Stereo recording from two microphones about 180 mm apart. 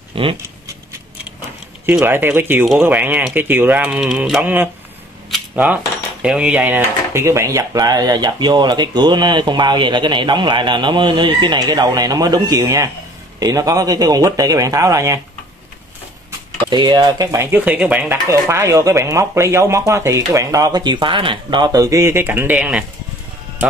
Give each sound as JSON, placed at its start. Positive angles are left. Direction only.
{"t": 0.1, "sound": "a sound", "side_deg": -30}
{"t": 1.9, "sound": "speech", "side_deg": -10}
{"t": 5.3, "sound": "cutlery", "side_deg": -5}
{"t": 6.2, "sound": "speech", "side_deg": -5}
{"t": 16.3, "sound": "speech", "side_deg": -25}